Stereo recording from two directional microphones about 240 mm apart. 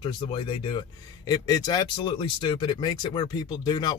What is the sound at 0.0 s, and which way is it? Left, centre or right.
Speech, centre.